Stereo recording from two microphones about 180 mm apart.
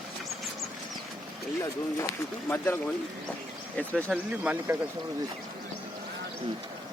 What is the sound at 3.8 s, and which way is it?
Speech, 5° left (ahead or behind).